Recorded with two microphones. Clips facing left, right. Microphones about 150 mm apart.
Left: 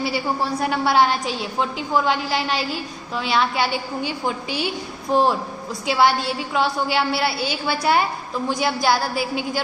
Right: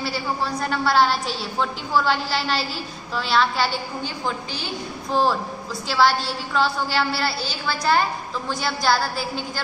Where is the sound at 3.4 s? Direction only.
5° left (ahead or behind).